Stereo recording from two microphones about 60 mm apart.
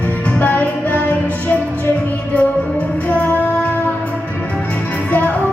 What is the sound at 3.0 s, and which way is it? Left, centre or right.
Female singing, left.